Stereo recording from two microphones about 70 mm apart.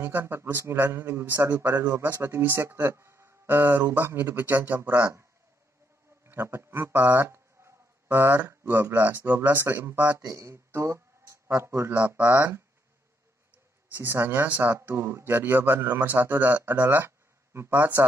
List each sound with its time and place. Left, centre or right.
0.0 s speech: right
6.2 s a sound: right
8.9 s speech: right
10.2 s speech: right
13.9 s speech: right